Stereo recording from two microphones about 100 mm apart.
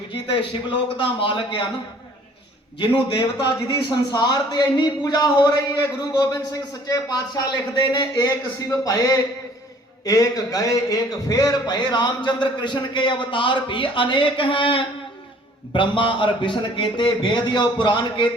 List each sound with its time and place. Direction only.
1.0 s a man's voice: 60° left (ahead or behind)
2.7 s a man's voice: 55° left (ahead or behind)